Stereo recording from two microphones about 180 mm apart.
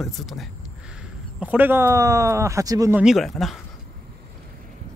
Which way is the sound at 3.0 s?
Centre (ahead or behind).